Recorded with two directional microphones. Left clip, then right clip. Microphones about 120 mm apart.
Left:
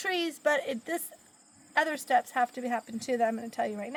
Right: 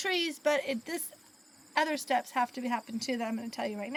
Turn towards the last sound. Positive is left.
turn(degrees=25)  # may be behind; listen again after turning